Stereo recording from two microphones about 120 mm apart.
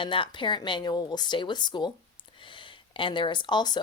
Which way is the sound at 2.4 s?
45° left (ahead or behind).